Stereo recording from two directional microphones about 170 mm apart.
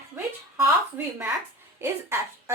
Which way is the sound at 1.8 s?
15° right (ahead or behind).